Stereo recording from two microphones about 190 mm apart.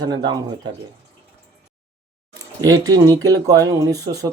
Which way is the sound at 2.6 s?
20° right (ahead or behind).